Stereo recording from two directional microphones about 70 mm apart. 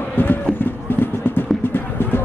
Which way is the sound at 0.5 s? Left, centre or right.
Left.